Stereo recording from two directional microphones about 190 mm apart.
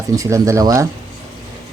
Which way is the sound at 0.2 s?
15° right (ahead or behind).